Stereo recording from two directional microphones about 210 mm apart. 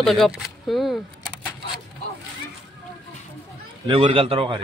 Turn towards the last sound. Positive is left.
turn(degrees=-25)  # may be behind; listen again after turning